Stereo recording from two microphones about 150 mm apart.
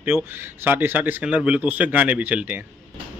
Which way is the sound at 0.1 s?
25° left (ahead or behind).